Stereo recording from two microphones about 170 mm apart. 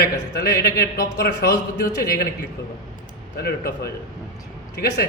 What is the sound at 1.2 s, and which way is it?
Speech, 75° left (ahead or behind).